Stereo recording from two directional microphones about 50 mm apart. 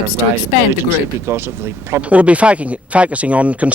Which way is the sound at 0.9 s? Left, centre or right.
Right.